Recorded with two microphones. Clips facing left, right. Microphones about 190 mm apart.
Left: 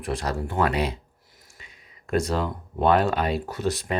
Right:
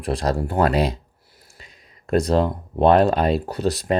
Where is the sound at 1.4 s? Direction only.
35° right (ahead or behind).